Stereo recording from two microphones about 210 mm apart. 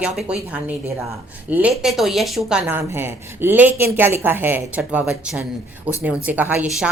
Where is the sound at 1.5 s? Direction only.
5° right (ahead or behind).